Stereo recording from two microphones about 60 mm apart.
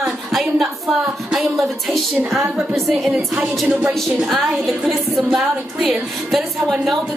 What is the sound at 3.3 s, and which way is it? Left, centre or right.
Music, right.